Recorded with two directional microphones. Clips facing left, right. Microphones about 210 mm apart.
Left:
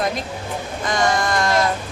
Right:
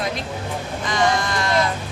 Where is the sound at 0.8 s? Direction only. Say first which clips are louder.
Left 1 dB; 45° left (ahead or behind).